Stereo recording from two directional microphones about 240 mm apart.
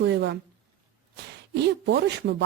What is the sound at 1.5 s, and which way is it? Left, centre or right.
Speech, right.